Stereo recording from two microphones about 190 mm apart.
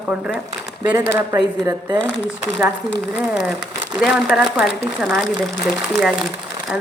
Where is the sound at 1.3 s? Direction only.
20° right (ahead or behind).